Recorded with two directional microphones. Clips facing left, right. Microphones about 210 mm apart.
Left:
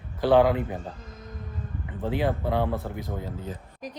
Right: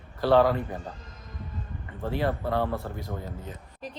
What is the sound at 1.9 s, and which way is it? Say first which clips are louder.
A woman's voice: left 2 dB; 15° left (ahead or behind).